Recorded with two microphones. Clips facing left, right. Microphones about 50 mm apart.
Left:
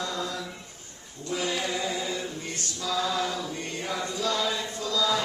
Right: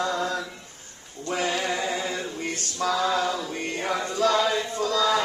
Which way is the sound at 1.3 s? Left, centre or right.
Right.